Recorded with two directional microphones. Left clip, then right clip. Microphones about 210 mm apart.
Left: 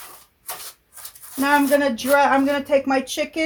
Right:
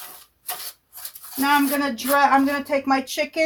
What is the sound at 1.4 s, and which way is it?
Speech, 25° left (ahead or behind).